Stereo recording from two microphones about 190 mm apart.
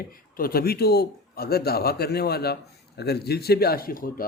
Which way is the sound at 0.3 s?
50° left (ahead or behind).